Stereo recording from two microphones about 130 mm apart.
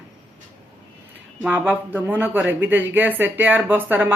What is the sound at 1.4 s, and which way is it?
Speech, 15° right (ahead or behind).